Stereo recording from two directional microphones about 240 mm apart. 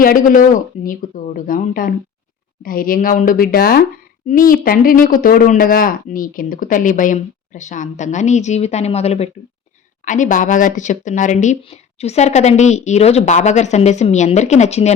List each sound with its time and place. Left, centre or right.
0.0 s speech: left